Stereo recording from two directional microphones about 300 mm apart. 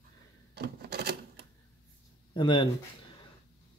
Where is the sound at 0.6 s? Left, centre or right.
Right.